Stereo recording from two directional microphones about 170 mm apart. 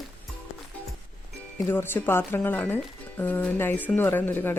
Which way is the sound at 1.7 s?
10° left (ahead or behind).